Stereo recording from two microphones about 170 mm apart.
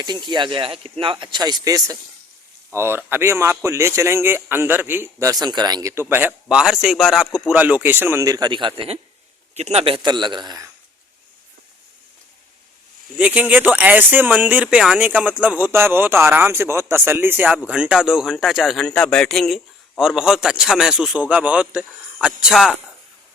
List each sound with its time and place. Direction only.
0.0 s speech: 25° right (ahead or behind)
13.1 s a man's voice: 5° right (ahead or behind)